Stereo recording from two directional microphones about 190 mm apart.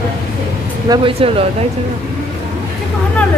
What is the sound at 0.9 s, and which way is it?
Speech, 20° right (ahead or behind).